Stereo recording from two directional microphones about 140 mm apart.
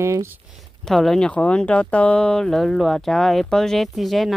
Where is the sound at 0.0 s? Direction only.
20° right (ahead or behind).